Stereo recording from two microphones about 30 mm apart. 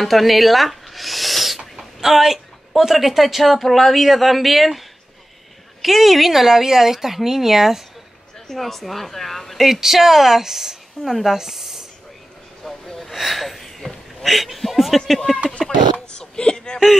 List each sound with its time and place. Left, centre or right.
0.0 s owl: centre
1.8 s a woman's voice: centre
8.5 s a woman's voice: centre
9.6 s speech: centre
12.6 s gasp: centre
13.1 s a sound: centre
14.3 s a woman's voice: centre
15.6 s speech: centre
16.2 s a sound: left